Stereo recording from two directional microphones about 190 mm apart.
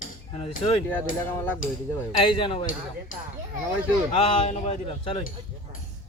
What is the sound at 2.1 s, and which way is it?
Speech, 25° left (ahead or behind).